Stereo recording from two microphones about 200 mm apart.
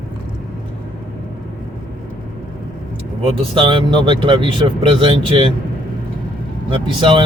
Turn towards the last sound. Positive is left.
turn(degrees=-25)  # may be behind; listen again after turning